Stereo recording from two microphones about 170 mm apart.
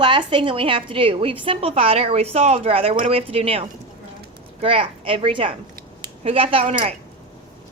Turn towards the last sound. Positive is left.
turn(degrees=-35)  # may be behind; listen again after turning